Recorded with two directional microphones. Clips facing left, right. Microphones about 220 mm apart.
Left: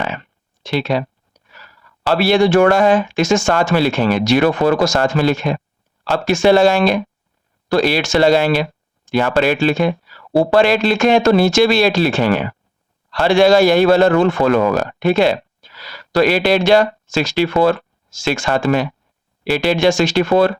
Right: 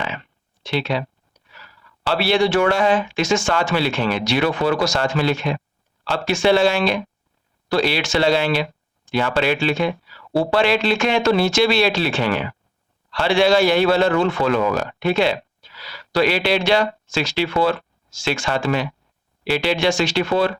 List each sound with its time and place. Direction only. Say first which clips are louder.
0.6 s speech: left 4 dB; 45° left (ahead or behind)